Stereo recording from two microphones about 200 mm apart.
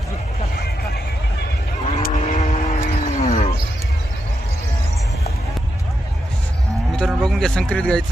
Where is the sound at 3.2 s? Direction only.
35° left (ahead or behind).